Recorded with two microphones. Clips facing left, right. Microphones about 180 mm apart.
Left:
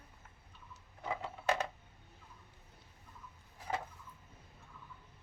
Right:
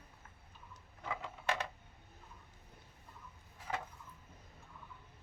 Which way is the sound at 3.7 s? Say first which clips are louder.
Left 2 dB; 30° left (ahead or behind).